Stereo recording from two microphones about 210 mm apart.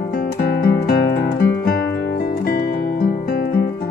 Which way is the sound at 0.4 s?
50° left (ahead or behind).